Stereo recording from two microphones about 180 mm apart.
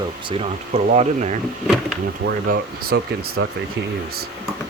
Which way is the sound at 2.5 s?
60° right (ahead or behind).